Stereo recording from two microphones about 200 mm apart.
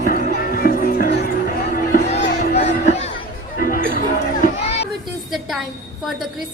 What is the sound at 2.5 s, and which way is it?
Music, 35° left (ahead or behind).